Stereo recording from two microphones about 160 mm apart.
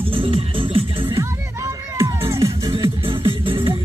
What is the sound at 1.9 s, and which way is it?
Music, 20° right (ahead or behind).